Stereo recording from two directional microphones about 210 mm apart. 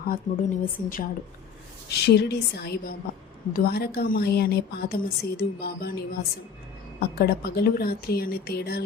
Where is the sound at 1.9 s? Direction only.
50° left (ahead or behind).